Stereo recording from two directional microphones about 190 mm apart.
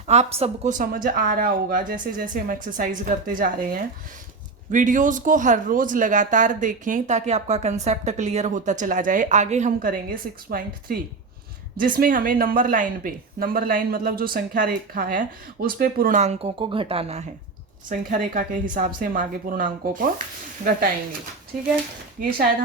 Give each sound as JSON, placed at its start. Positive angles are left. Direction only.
{"t": 0.1, "sound": "speech", "side_deg": -35}
{"t": 17.8, "sound": "speech", "side_deg": -45}